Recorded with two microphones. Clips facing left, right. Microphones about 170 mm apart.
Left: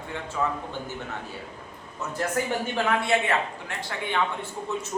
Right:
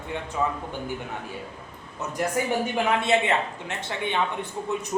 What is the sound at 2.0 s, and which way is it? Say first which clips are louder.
Speech: right 1 dB; 15° right (ahead or behind).